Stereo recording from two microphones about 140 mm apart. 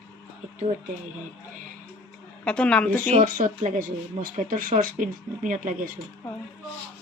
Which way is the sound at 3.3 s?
75° right (ahead or behind).